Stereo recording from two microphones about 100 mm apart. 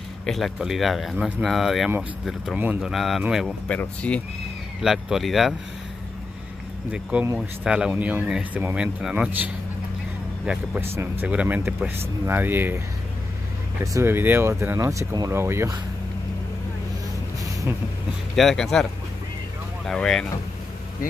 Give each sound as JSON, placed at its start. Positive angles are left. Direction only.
{"t": 0.3, "sound": "speech", "side_deg": 0}
{"t": 2.5, "sound": "speech", "side_deg": -15}
{"t": 2.9, "sound": "speech", "side_deg": 0}
{"t": 3.6, "sound": "speech", "side_deg": 10}
{"t": 4.8, "sound": "speech", "side_deg": -5}
{"t": 6.9, "sound": "speech", "side_deg": -10}
{"t": 10.4, "sound": "speech", "side_deg": -10}
{"t": 13.9, "sound": "speech", "side_deg": -25}
{"t": 18.3, "sound": "speech", "side_deg": 5}
{"t": 19.9, "sound": "speech", "side_deg": 5}